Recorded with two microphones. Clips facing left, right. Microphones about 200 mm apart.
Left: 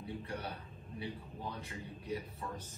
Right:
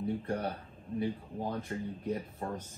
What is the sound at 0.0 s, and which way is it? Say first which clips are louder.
Speech: right 9 dB; 50° right (ahead or behind).